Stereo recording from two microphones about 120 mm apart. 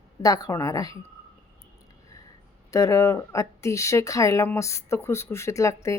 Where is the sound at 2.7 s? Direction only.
25° left (ahead or behind).